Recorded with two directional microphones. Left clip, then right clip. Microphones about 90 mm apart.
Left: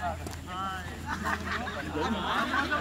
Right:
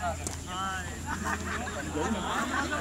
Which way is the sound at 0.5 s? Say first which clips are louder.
Right 1 dB; 10° right (ahead or behind).